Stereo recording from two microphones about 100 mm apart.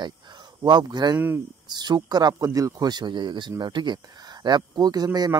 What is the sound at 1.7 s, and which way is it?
A man's voice, 45° right (ahead or behind).